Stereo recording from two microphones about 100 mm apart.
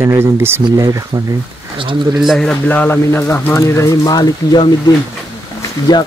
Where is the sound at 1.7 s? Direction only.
55° right (ahead or behind).